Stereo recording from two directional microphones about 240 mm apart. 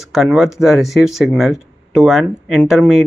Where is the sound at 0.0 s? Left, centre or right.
Centre.